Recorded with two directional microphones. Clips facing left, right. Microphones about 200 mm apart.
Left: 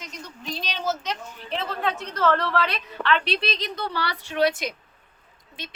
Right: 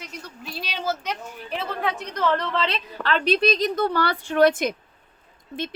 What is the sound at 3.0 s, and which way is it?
A woman's voice, 40° right (ahead or behind).